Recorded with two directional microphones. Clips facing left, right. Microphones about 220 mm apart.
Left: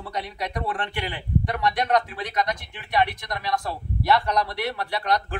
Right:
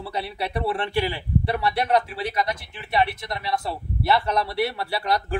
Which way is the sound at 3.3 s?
25° right (ahead or behind).